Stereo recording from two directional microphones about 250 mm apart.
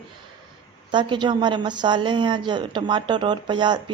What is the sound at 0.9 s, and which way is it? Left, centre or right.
A woman's voice, centre.